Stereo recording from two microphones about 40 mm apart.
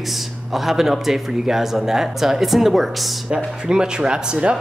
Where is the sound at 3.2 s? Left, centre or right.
Right.